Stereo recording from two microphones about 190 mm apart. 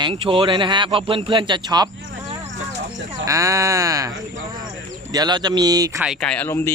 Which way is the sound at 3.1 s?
15° right (ahead or behind).